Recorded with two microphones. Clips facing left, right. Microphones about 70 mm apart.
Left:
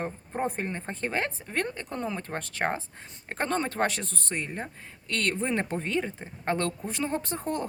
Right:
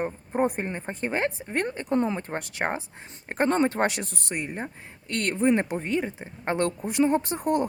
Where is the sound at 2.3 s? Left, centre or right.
Centre.